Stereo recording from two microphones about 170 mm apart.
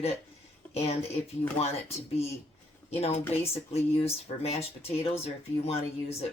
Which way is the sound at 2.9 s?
35° left (ahead or behind).